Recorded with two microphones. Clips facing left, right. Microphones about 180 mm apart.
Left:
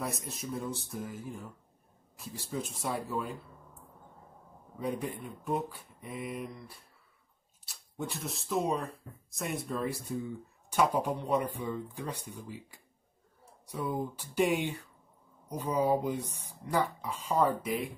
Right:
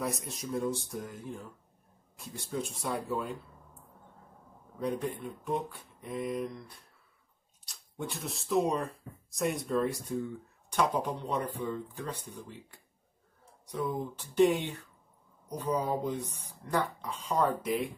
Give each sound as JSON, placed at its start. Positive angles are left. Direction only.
{"t": 0.0, "sound": "speech", "side_deg": 0}
{"t": 4.7, "sound": "speech", "side_deg": 5}